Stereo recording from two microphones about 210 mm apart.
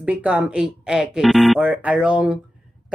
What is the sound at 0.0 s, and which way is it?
A woman's voice, 5° right (ahead or behind).